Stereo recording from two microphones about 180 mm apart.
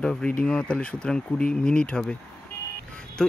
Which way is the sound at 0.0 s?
5° left (ahead or behind).